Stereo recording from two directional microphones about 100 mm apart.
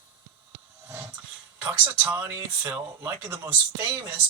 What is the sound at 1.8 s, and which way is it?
Speech, 20° right (ahead or behind).